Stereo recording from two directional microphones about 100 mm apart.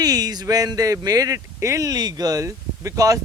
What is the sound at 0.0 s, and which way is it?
Speech, 40° right (ahead or behind).